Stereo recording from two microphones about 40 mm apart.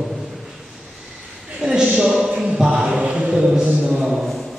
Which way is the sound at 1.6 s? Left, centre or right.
Centre.